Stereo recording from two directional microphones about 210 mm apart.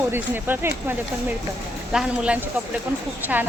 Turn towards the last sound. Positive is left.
turn(degrees=-5)  # may be behind; listen again after turning